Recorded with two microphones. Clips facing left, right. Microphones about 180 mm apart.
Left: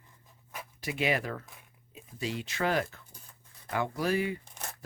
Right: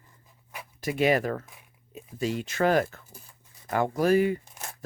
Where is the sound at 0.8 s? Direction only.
45° right (ahead or behind).